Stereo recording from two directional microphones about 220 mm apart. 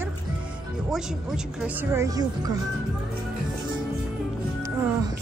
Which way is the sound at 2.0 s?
15° right (ahead or behind).